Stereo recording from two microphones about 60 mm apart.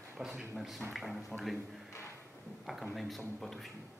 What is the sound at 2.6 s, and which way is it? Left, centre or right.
Speech, centre.